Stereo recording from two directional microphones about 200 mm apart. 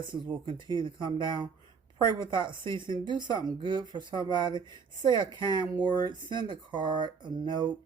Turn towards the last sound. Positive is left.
turn(degrees=-20)  # may be behind; listen again after turning